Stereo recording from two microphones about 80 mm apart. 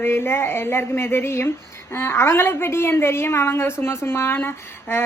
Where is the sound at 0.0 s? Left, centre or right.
Left.